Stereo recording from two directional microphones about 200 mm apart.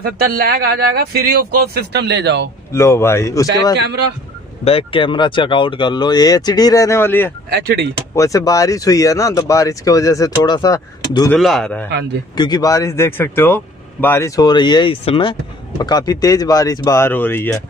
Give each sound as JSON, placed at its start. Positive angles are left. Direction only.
{"t": 0.0, "sound": "speech", "side_deg": -50}
{"t": 2.7, "sound": "speech", "side_deg": 15}
{"t": 3.7, "sound": "a man's voice", "side_deg": -60}
{"t": 4.6, "sound": "speech", "side_deg": 25}
{"t": 7.4, "sound": "speech", "side_deg": -55}
{"t": 8.2, "sound": "speech", "side_deg": 15}
{"t": 11.2, "sound": "speech", "side_deg": 0}
{"t": 12.4, "sound": "speech", "side_deg": 20}